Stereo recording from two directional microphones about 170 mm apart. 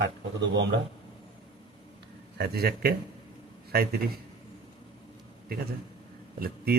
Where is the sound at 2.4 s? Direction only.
65° right (ahead or behind).